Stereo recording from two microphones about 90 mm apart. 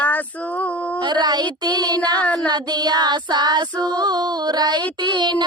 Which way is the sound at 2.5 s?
50° right (ahead or behind).